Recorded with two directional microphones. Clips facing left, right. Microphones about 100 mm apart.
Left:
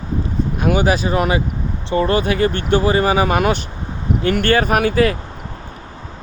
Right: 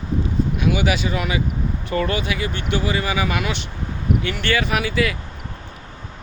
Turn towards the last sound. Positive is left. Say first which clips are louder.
# left 6 dB
turn(degrees=45)  # may be behind; listen again after turning